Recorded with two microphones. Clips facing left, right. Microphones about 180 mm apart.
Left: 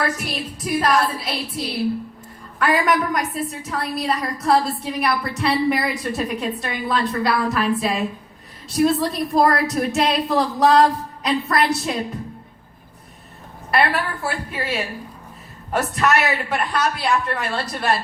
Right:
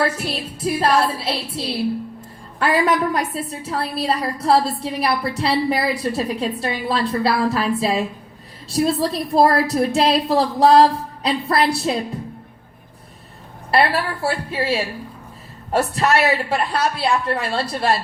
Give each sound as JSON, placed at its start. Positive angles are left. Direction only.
{"t": 0.0, "sound": "a woman's voice", "side_deg": -30}
{"t": 13.7, "sound": "a woman's voice", "side_deg": -30}